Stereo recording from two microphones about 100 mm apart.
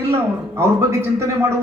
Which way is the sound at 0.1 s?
25° right (ahead or behind).